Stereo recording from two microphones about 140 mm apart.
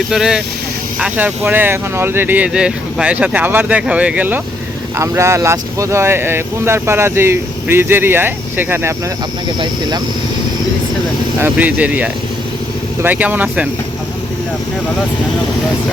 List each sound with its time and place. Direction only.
0.1 s speech: 5° right (ahead or behind)
11.3 s speech: 15° right (ahead or behind)